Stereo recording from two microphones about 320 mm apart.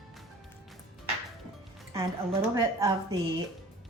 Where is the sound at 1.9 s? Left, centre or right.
Centre.